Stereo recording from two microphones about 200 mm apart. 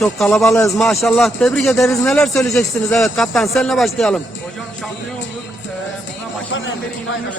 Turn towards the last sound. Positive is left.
turn(degrees=75)  # may be behind; listen again after turning